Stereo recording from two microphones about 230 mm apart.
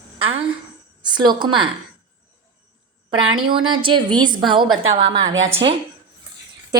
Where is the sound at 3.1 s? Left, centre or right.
Right.